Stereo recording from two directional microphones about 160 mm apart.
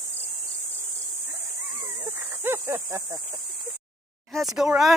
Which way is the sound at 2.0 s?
15° right (ahead or behind).